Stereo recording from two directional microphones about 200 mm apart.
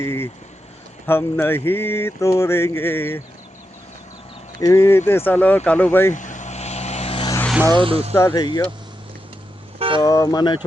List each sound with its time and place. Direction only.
0.0 s speech: 10° left (ahead or behind)
4.6 s speech: 15° left (ahead or behind)
6.1 s vehicle: 40° left (ahead or behind)
7.7 s speech: 25° right (ahead or behind)
8.1 s speech: 15° left (ahead or behind)
9.7 s vehicle: 30° right (ahead or behind)
10.0 s speech: 15° left (ahead or behind)